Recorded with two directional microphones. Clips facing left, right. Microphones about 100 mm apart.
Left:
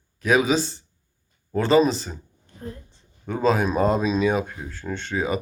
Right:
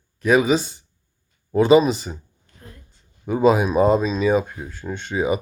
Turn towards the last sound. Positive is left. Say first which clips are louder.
# right 3 dB
turn(degrees=-5)  # may be behind; listen again after turning